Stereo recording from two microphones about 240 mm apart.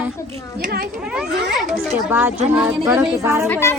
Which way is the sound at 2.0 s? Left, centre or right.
Centre.